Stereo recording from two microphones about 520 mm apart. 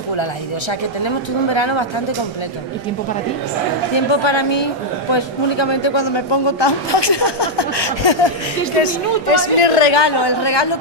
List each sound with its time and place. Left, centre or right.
0.1 s a woman's voice: left
3.9 s a woman's voice: left
8.8 s a woman's voice: left
9.9 s a man's voice: left